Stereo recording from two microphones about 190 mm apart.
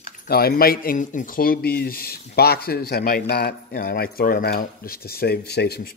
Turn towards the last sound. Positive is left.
turn(degrees=55)  # may be behind; listen again after turning